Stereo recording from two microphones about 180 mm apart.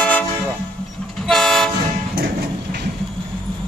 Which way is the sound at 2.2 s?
55° right (ahead or behind).